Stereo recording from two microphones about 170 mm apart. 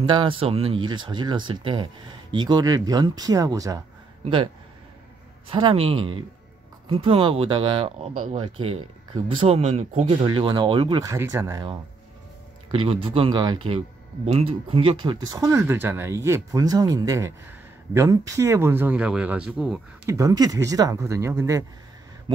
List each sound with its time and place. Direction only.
0.0 s speech: 30° right (ahead or behind)
5.5 s speech: 30° right (ahead or behind)
10.2 s speech: 25° right (ahead or behind)
12.7 s speech: 30° right (ahead or behind); by 19.8 s 5° right (ahead or behind)
20.1 s speech: 20° right (ahead or behind)